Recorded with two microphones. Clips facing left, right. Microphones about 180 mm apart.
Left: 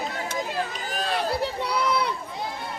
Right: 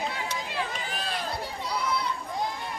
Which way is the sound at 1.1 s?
65° left (ahead or behind).